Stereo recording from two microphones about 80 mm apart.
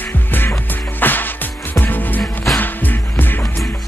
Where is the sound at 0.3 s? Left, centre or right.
Left.